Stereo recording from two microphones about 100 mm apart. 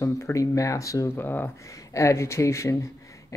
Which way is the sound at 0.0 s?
30° left (ahead or behind).